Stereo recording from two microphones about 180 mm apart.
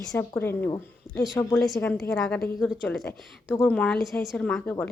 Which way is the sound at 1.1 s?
Centre (ahead or behind).